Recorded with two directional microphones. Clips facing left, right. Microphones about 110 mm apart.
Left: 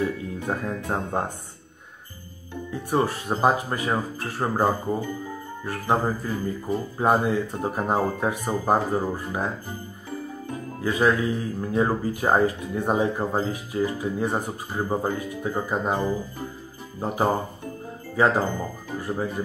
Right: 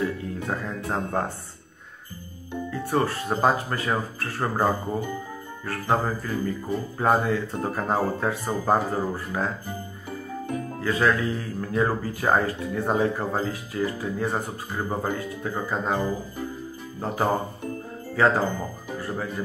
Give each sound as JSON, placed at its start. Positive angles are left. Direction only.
{"t": 0.0, "sound": "speech", "side_deg": 15}
{"t": 2.7, "sound": "speech", "side_deg": 15}
{"t": 10.8, "sound": "speech", "side_deg": 15}